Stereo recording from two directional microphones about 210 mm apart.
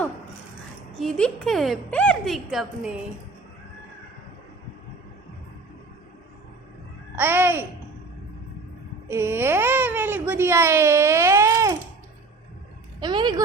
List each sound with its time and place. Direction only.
0.9 s a woman's voice: centre (ahead or behind)
7.2 s speech: 10° right (ahead or behind)
9.0 s a child's voice: 10° right (ahead or behind)
13.0 s speech: 20° right (ahead or behind)